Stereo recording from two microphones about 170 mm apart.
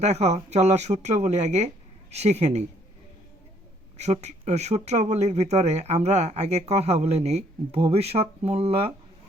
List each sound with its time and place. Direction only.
0.0 s speech: 40° right (ahead or behind)
3.9 s speech: 40° right (ahead or behind)